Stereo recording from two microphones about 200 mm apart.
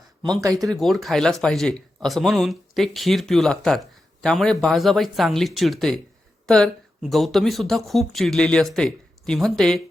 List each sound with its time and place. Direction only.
0.2 s speech: 20° right (ahead or behind)
0.6 s speech: centre (ahead or behind)